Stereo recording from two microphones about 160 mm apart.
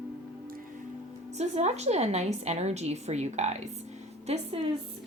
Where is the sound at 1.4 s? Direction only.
45° right (ahead or behind).